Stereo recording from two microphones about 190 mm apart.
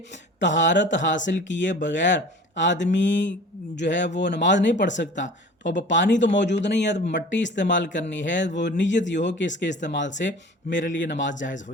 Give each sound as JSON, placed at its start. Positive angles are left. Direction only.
{"t": 0.3, "sound": "speech", "side_deg": 70}